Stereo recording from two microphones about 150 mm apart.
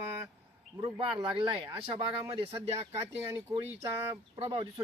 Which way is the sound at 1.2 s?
35° right (ahead or behind).